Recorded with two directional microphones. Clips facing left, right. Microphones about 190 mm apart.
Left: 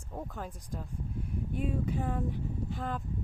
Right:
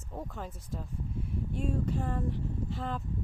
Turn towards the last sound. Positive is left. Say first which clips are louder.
# even
turn(degrees=0)  # may be behind; listen again after turning